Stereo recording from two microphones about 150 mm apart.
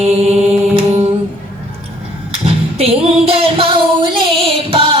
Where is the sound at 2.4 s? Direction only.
40° right (ahead or behind).